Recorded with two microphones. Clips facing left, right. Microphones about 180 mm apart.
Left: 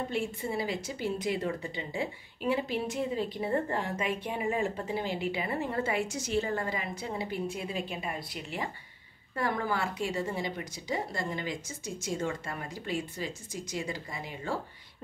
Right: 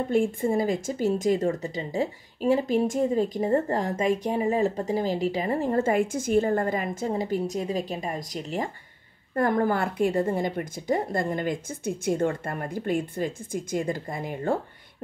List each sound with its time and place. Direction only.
0.1 s a woman's voice: 50° right (ahead or behind)